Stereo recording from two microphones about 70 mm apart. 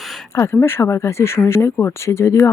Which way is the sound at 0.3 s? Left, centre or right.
Left.